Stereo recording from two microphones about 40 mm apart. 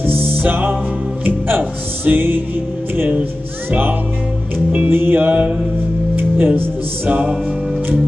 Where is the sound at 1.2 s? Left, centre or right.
Right.